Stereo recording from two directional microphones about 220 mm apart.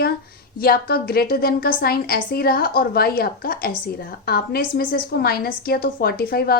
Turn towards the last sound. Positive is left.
turn(degrees=45)  # may be behind; listen again after turning